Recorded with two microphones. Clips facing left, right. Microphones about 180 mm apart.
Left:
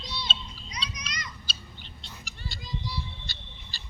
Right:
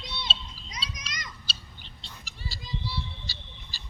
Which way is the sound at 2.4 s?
Centre (ahead or behind).